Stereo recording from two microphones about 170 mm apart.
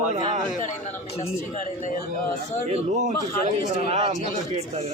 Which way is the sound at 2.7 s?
45° right (ahead or behind).